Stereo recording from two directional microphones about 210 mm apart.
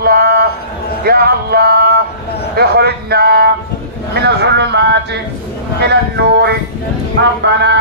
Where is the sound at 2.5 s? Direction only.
50° right (ahead or behind).